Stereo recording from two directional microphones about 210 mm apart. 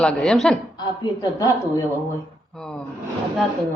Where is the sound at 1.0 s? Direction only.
15° left (ahead or behind).